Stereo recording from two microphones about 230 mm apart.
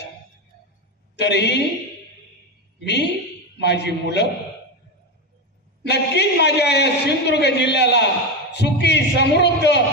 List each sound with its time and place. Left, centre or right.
1.1 s speech: left
2.8 s a man's voice: left
5.8 s a man's voice: left